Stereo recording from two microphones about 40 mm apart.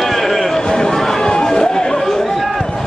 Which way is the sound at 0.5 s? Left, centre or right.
Centre.